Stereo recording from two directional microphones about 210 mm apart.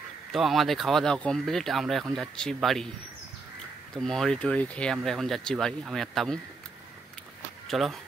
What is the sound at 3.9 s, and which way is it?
Speech, centre (ahead or behind).